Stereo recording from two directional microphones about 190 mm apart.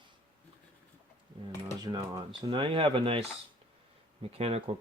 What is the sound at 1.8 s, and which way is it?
Speech, 20° right (ahead or behind).